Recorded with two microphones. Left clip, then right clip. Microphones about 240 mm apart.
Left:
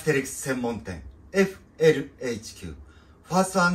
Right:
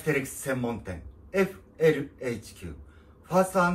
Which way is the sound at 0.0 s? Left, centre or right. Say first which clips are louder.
Left 3 dB; centre.